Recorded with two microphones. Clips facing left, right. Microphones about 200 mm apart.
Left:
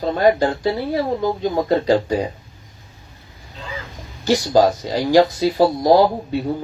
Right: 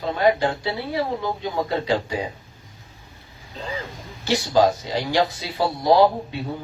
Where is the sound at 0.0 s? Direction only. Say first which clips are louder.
Left 4 dB; 40° left (ahead or behind).